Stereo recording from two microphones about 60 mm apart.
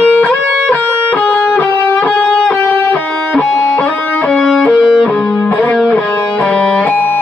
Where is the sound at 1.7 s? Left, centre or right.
Left.